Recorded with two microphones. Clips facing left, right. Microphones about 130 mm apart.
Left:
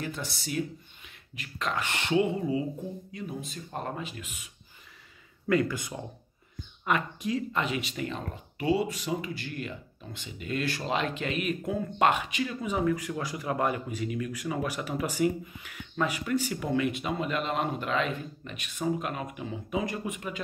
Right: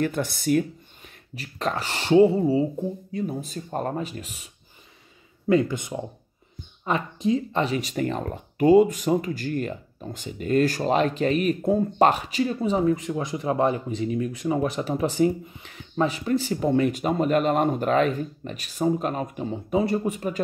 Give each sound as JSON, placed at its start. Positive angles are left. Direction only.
{"t": 0.0, "sound": "speech", "side_deg": -55}
{"t": 1.3, "sound": "speech", "side_deg": -35}
{"t": 5.5, "sound": "speech", "side_deg": -25}